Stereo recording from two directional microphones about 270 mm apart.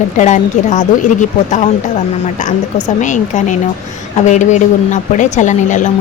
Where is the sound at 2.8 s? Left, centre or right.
Left.